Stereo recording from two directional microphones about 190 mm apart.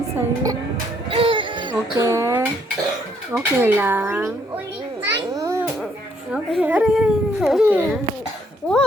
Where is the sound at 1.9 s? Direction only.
15° right (ahead or behind).